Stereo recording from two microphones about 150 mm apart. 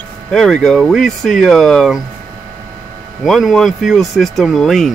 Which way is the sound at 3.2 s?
Centre (ahead or behind).